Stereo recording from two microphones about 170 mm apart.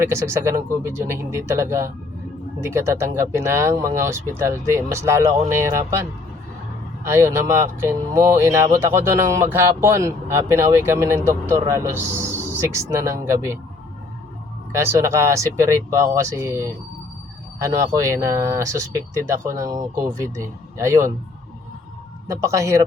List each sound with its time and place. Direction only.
0.0 s speech: 15° right (ahead or behind)
7.1 s speech: 15° right (ahead or behind)
14.7 s speech: 15° right (ahead or behind)
22.3 s speech: 15° right (ahead or behind)